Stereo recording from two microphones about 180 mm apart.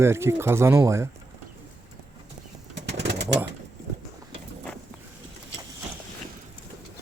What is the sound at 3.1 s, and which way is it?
Pigeon, 70° right (ahead or behind).